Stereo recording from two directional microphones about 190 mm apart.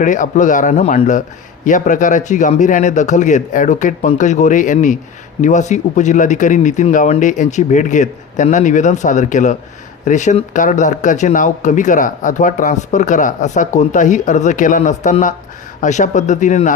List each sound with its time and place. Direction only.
0.0 s speech: 40° left (ahead or behind)